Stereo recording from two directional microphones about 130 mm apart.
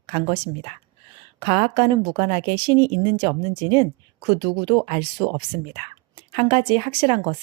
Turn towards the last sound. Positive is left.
turn(degrees=-45)  # may be behind; listen again after turning